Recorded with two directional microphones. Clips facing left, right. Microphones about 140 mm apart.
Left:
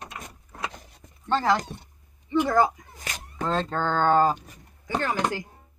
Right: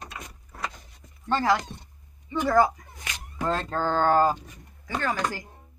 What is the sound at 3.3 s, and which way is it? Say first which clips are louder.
Speech: left 1 dB; 5° right (ahead or behind).